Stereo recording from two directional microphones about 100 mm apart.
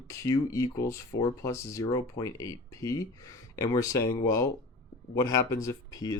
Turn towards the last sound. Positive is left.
turn(degrees=40)  # may be behind; listen again after turning